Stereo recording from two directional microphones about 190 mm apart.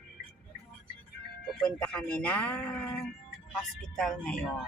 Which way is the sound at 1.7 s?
5° left (ahead or behind).